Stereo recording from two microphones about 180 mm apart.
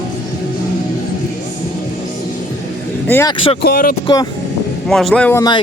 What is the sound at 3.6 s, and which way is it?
Speech, 55° left (ahead or behind).